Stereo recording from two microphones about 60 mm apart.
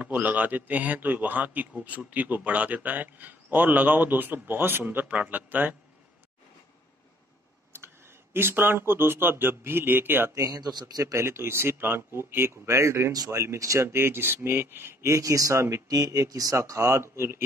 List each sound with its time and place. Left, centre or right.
0.1 s a man's voice: right
7.7 s speech: right
10.3 s a man's voice: right
11.1 s speech: right
13.6 s speech: right
13.9 s speech: right
16.6 s speech: right